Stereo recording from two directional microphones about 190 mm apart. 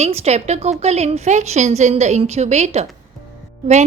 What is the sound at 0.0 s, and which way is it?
A woman's voice, 35° right (ahead or behind).